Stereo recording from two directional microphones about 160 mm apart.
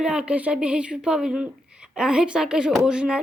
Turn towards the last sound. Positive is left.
turn(degrees=-5)  # may be behind; listen again after turning